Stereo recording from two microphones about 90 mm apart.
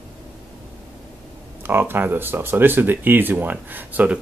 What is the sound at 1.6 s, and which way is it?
Speech, 25° right (ahead or behind).